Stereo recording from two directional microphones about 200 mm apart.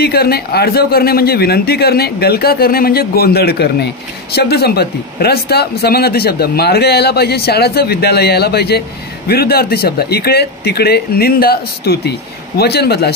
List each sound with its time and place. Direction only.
0.0 s speech: 50° left (ahead or behind)